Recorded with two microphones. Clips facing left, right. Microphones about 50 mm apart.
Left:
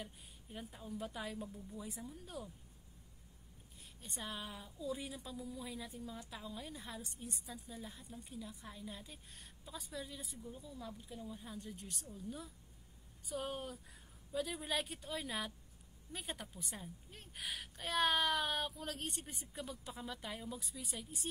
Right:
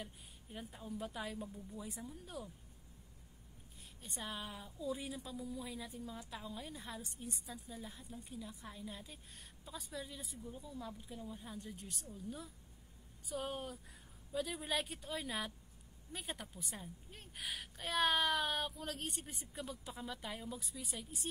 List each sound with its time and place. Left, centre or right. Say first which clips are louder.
0.0 s a woman's voice: even; centre
4.0 s a woman's voice: even; centre